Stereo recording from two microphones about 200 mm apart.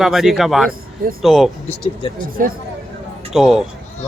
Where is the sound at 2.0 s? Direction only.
25° left (ahead or behind).